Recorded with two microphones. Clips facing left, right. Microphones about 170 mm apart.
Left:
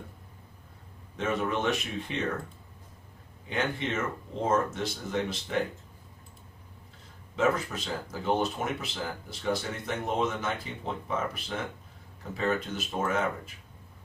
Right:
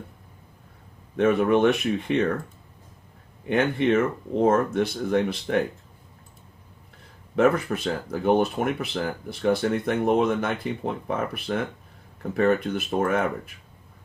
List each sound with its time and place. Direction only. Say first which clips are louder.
1.1 s speech: right 10 dB; 60° right (ahead or behind)
3.4 s speech: right 9 dB; 60° right (ahead or behind)
7.3 s speech: right 7 dB; 60° right (ahead or behind)